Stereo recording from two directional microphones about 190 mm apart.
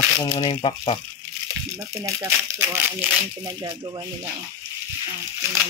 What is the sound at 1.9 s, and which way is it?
Speech, 15° right (ahead or behind).